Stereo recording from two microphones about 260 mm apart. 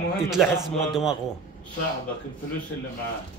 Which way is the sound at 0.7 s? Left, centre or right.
Centre.